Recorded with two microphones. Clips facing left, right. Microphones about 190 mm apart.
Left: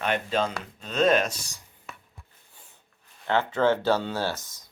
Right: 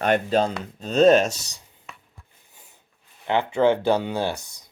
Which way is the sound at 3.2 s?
15° right (ahead or behind).